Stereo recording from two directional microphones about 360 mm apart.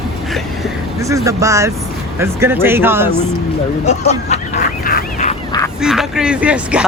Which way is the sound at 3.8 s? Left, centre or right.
Centre.